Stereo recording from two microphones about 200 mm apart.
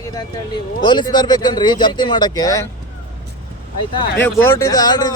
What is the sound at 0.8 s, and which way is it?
Speech, 20° left (ahead or behind).